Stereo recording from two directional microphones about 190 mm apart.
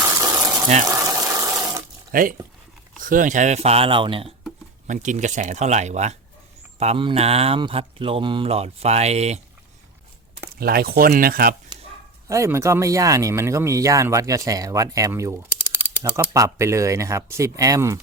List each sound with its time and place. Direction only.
0.0 s water: 15° right (ahead or behind)
2.1 s speech: 45° right (ahead or behind); by 4.4 s 30° right (ahead or behind)
4.9 s speech: 40° right (ahead or behind)
10.6 s speech: 55° right (ahead or behind)
12.3 s speech: 15° right (ahead or behind)